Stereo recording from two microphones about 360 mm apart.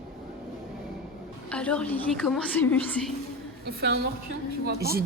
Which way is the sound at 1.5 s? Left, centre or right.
Centre.